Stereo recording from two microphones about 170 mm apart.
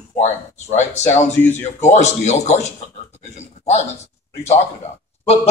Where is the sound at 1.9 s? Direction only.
40° left (ahead or behind).